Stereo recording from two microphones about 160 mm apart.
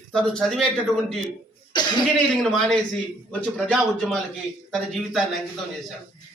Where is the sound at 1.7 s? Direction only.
30° left (ahead or behind).